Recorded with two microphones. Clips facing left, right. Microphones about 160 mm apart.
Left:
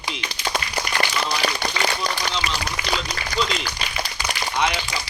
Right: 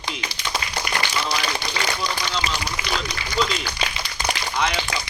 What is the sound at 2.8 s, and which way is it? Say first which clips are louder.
Speech: even; 25° right (ahead or behind).